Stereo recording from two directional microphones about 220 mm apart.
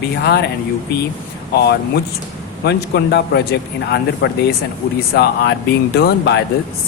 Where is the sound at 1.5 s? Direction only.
45° left (ahead or behind).